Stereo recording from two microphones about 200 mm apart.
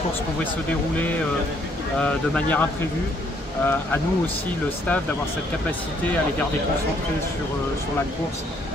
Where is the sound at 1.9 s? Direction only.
5° left (ahead or behind).